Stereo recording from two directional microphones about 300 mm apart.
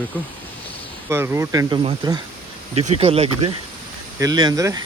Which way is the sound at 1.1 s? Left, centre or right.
Centre.